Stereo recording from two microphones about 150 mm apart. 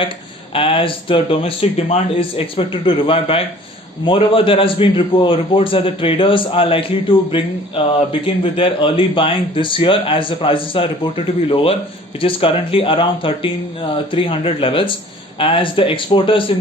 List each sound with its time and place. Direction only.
0.6 s a man's voice: 35° left (ahead or behind)